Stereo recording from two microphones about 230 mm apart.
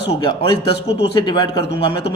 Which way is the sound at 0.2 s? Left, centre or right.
Left.